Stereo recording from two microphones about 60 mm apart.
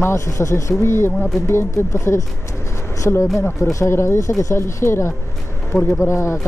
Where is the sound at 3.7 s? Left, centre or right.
Left.